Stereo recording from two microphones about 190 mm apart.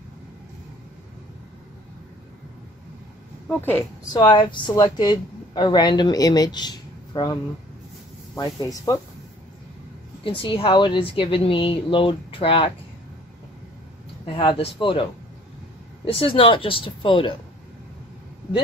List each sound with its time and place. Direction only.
4.1 s speech: 25° left (ahead or behind)
8.4 s speech: 20° left (ahead or behind)
10.2 s speech: 25° left (ahead or behind)
14.2 s speech: 25° left (ahead or behind)
16.1 s speech: 30° left (ahead or behind)